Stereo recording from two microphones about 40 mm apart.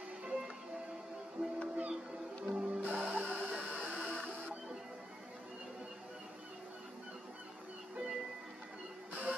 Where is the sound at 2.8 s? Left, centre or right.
Right.